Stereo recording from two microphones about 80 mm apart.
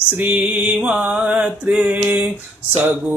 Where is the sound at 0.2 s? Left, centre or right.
Centre.